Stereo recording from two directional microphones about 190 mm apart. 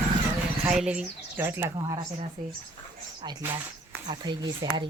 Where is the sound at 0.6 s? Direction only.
5° right (ahead or behind).